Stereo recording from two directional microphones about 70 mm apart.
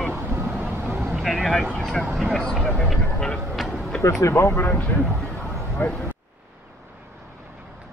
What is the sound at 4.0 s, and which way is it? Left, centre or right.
Speech, left.